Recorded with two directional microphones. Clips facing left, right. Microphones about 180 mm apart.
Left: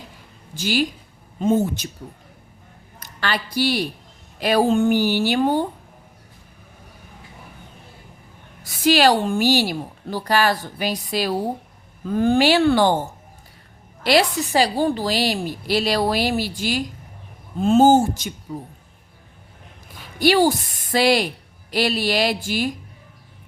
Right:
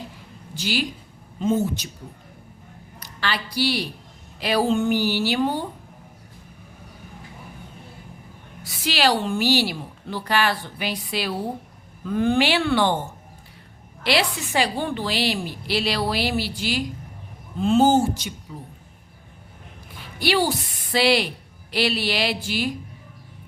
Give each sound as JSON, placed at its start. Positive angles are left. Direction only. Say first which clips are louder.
{"t": 0.5, "sound": "a woman's voice", "louder": "left 4 dB", "side_deg": 45}
{"t": 3.0, "sound": "a woman's voice", "louder": "left 3 dB", "side_deg": 50}
{"t": 8.6, "sound": "a woman's voice", "louder": "left 6 dB", "side_deg": 45}
{"t": 14.0, "sound": "a woman's voice", "louder": "left 5 dB", "side_deg": 40}
{"t": 20.1, "sound": "a woman's voice", "louder": "left 5 dB", "side_deg": 45}